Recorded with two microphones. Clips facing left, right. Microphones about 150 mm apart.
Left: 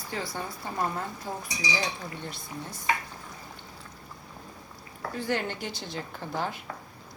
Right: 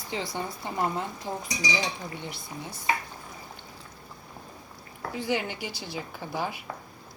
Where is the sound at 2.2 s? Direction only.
10° right (ahead or behind).